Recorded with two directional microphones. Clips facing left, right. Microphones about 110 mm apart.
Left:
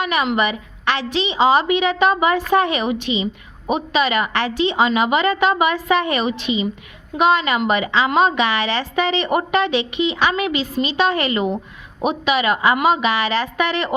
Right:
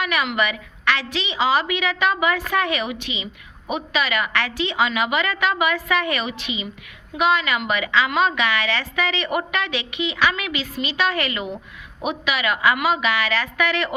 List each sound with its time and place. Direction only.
0.0 s a woman's voice: 25° left (ahead or behind)